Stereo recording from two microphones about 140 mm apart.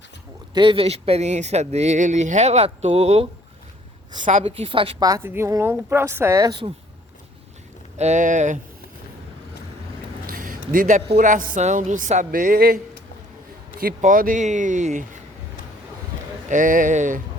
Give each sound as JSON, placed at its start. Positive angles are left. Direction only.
{"t": 0.5, "sound": "speech", "side_deg": -35}
{"t": 4.3, "sound": "speech", "side_deg": -65}
{"t": 4.5, "sound": "a woman's voice", "side_deg": -40}
{"t": 5.0, "sound": "speech", "side_deg": -20}
{"t": 7.9, "sound": "speech", "side_deg": -55}
{"t": 10.2, "sound": "a sound", "side_deg": -85}
{"t": 11.2, "sound": "a woman's voice", "side_deg": -70}
{"t": 16.5, "sound": "a woman's voice", "side_deg": -75}